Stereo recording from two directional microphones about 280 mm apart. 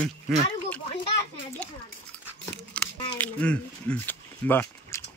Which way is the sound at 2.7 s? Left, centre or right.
Centre.